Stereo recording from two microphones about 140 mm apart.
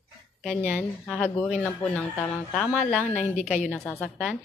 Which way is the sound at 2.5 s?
Centre (ahead or behind).